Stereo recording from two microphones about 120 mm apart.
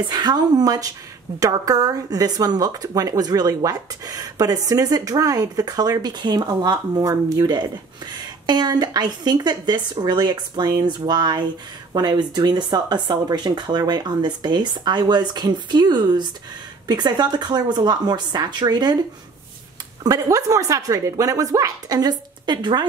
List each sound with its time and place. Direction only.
0.0 s speech: 35° right (ahead or behind)
20.0 s speech: 30° right (ahead or behind)